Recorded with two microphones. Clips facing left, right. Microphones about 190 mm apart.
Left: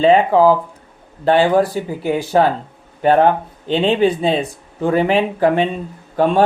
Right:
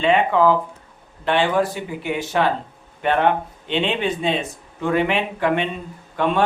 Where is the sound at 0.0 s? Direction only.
35° left (ahead or behind).